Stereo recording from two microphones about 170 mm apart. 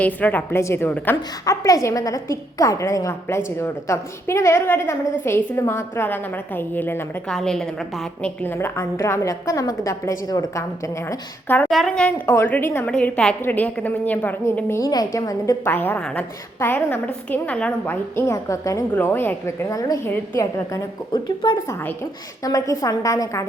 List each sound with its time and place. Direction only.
0.0 s a woman's voice: 10° left (ahead or behind)
8.2 s a woman's voice: 15° left (ahead or behind)